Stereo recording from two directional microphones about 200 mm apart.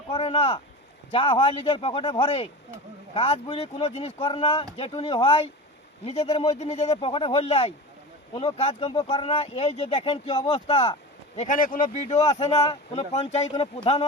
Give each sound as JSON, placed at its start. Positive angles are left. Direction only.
{"t": 0.1, "sound": "speech", "side_deg": 30}
{"t": 11.3, "sound": "speech", "side_deg": 40}